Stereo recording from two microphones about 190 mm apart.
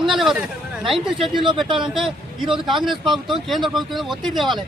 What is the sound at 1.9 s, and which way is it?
Speech, centre (ahead or behind).